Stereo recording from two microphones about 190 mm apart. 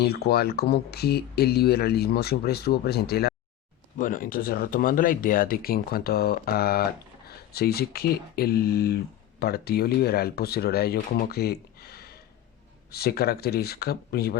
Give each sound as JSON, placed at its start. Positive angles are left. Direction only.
{"t": 0.0, "sound": "speech", "side_deg": 55}
{"t": 3.9, "sound": "speech", "side_deg": 45}